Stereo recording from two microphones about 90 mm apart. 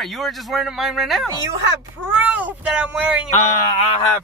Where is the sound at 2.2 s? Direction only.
15° right (ahead or behind).